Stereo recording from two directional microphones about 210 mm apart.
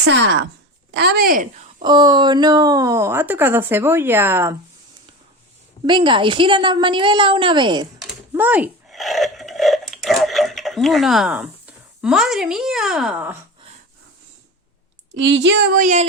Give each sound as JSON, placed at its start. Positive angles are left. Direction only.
{"t": 0.1, "sound": "a woman's voice", "side_deg": -60}
{"t": 1.8, "sound": "speech", "side_deg": -20}
{"t": 5.8, "sound": "a woman's voice", "side_deg": -25}
{"t": 8.3, "sound": "speech", "side_deg": -10}
{"t": 15.1, "sound": "a woman's voice", "side_deg": -60}